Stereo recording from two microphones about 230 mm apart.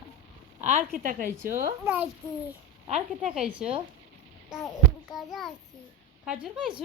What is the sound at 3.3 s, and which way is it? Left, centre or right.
A woman's voice, centre.